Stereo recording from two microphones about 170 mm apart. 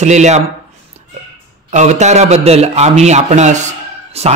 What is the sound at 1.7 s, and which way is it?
A man's voice, 45° right (ahead or behind).